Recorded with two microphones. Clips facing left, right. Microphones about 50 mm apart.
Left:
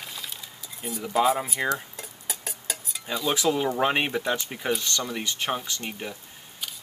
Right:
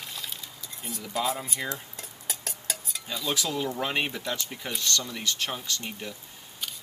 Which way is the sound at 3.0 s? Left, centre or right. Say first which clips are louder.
Left 6 dB; centre.